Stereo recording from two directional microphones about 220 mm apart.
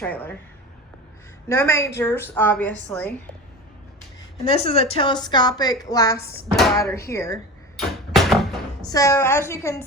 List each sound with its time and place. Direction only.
0.0 s a woman's voice: 5° left (ahead or behind)
1.5 s a woman's voice: 10° left (ahead or behind)
4.5 s a woman's voice: 25° left (ahead or behind)
7.8 s a sound: centre (ahead or behind)
8.9 s a woman's voice: 15° left (ahead or behind)